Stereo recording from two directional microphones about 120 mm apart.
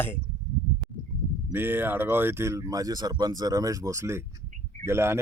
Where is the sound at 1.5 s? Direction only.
15° right (ahead or behind).